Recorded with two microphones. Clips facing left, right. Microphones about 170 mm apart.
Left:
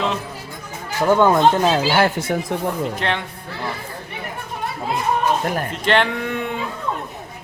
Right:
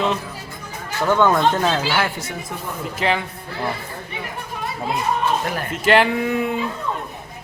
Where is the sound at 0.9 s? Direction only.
15° left (ahead or behind).